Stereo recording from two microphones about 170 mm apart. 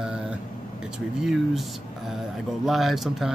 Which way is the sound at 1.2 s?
Centre (ahead or behind).